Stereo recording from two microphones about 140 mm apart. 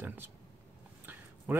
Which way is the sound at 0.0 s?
15° right (ahead or behind).